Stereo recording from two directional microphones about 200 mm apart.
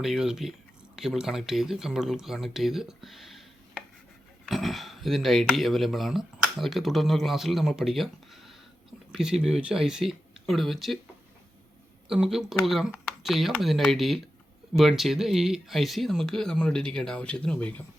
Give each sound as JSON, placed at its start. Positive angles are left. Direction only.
{"t": 0.0, "sound": "speech", "side_deg": 0}
{"t": 12.0, "sound": "speech", "side_deg": -5}